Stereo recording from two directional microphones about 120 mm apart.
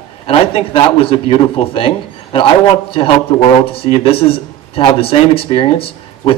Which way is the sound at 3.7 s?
50° left (ahead or behind).